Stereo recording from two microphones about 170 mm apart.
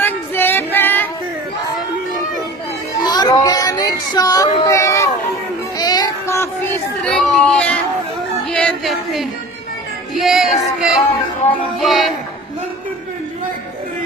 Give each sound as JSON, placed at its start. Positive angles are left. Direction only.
{"t": 0.0, "sound": "music", "side_deg": 10}
{"t": 3.1, "sound": "a sound", "side_deg": 25}
{"t": 5.7, "sound": "child singing", "side_deg": 20}
{"t": 7.0, "sound": "a sound", "side_deg": 5}
{"t": 8.4, "sound": "music", "side_deg": 5}
{"t": 10.2, "sound": "child singing", "side_deg": 0}